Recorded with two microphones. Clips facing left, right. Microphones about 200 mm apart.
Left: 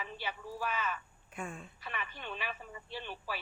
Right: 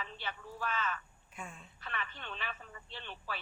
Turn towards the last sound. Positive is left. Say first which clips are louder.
# left 3 dB
turn(degrees=10)  # may be behind; listen again after turning